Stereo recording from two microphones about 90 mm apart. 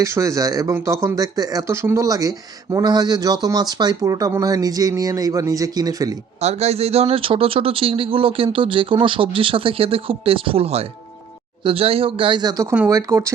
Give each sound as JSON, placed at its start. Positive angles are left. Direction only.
{"t": 0.0, "sound": "speech", "side_deg": -35}
{"t": 6.9, "sound": "speech", "side_deg": -90}
{"t": 8.5, "sound": "speech", "side_deg": -75}
{"t": 12.4, "sound": "speech", "side_deg": -50}
{"t": 12.9, "sound": "speech", "side_deg": -35}